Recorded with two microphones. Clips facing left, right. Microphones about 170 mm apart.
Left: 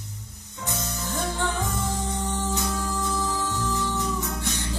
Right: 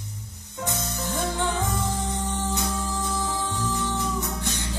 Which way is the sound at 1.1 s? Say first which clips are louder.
Right 1 dB; 15° right (ahead or behind).